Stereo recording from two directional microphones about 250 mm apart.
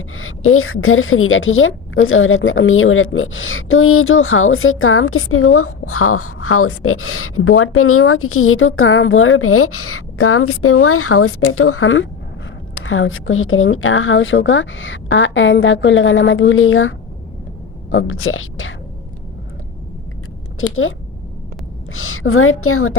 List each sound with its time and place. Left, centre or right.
0.2 s a woman's voice: left
17.9 s a woman's voice: left
20.6 s a woman's voice: left
21.9 s a woman's voice: left